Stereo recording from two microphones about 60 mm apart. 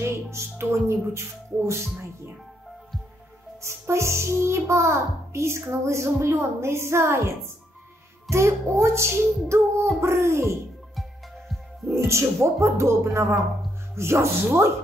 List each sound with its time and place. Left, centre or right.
0.0 s speech: right
3.6 s a child's voice: right
8.3 s a child's voice: right
11.0 s music: centre
12.1 s a child's voice: right